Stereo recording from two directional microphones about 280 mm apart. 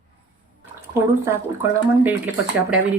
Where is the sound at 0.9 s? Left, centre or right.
Centre.